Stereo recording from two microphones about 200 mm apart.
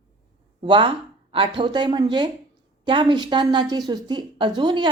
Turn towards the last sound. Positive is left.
turn(degrees=-20)  # may be behind; listen again after turning